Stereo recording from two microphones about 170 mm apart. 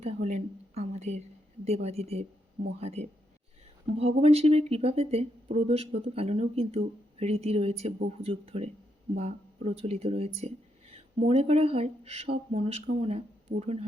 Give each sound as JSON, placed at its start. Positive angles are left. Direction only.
{"t": 0.0, "sound": "a woman's voice", "side_deg": -40}